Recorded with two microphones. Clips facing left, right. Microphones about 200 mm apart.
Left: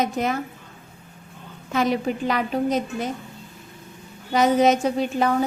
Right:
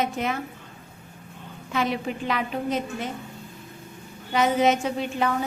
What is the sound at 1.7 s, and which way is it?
A woman's voice, 40° left (ahead or behind).